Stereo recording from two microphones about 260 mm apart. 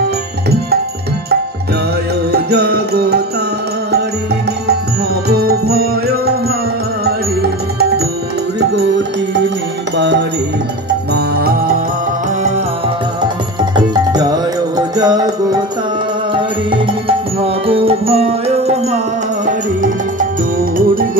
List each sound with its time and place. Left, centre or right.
2.3 s music: right
5.3 s music: right
8.5 s music: right
13.7 s music: centre
17.6 s music: right